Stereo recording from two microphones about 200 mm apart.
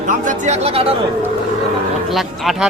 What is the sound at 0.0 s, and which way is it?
Speech, 40° right (ahead or behind).